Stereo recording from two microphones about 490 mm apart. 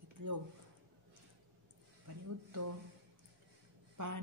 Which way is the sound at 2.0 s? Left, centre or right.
Right.